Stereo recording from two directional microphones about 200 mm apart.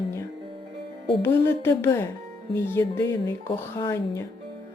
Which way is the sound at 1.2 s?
10° left (ahead or behind).